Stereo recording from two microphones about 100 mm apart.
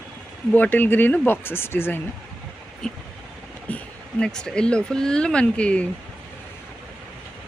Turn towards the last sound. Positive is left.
turn(degrees=10)  # may be behind; listen again after turning